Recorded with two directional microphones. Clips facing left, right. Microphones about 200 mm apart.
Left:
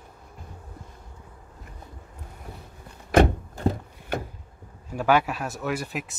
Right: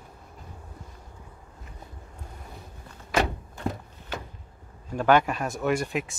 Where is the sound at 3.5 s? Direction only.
35° left (ahead or behind).